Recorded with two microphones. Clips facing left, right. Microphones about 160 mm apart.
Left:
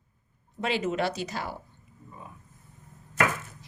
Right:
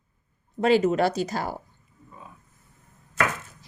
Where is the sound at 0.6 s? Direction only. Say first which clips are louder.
Right 8 dB; 40° right (ahead or behind).